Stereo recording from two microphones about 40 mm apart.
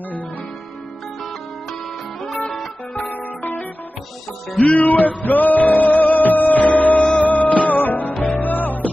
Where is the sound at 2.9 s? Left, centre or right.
Left.